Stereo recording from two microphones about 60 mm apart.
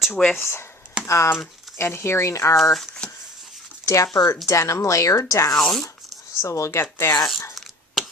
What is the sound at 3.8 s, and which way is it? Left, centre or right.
Speech, left.